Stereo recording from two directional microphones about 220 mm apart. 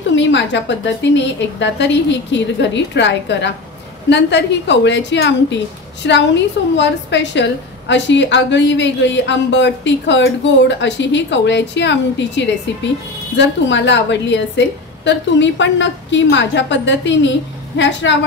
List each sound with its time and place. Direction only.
0.1 s a woman's voice: 55° left (ahead or behind)